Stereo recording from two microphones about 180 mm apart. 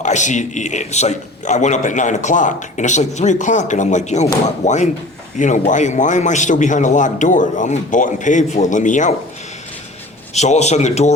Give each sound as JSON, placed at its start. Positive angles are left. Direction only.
{"t": 0.0, "sound": "a man's voice", "side_deg": 40}
{"t": 10.3, "sound": "a man's voice", "side_deg": 40}